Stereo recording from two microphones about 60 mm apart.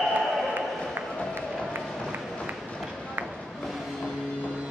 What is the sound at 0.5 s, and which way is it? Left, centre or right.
Run, right.